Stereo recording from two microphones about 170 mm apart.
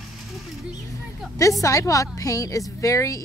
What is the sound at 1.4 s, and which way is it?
A woman's voice, 20° left (ahead or behind).